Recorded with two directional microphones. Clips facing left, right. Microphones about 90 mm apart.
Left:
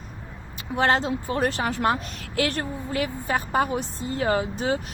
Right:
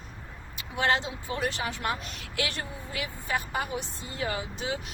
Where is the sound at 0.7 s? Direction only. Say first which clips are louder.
Left 5 dB; 40° left (ahead or behind).